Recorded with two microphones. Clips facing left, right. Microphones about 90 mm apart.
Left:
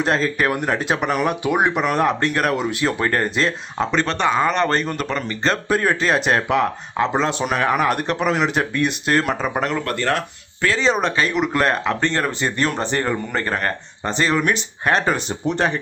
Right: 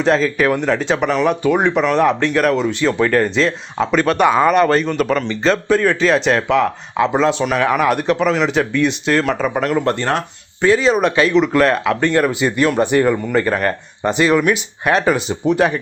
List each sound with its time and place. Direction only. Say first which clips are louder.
0.0 s speech: right 4 dB; 5° left (ahead or behind)
3.9 s speech: right 6 dB; 10° right (ahead or behind)
9.7 s speech: right 4 dB; 25° right (ahead or behind)
10.8 s speech: right 4 dB; 5° right (ahead or behind)
12.0 s speech: right 8 dB; 10° right (ahead or behind)